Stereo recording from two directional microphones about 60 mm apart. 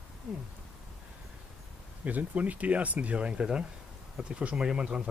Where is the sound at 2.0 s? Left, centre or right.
Right.